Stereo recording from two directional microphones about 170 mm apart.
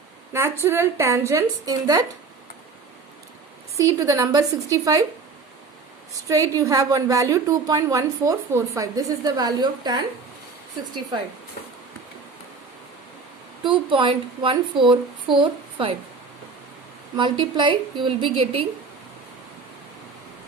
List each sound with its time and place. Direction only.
0.3 s a woman's voice: 15° right (ahead or behind)
3.8 s a woman's voice: 20° right (ahead or behind)
6.2 s a woman's voice: 20° right (ahead or behind)
13.7 s a woman's voice: 30° right (ahead or behind)
17.2 s a woman's voice: 25° right (ahead or behind)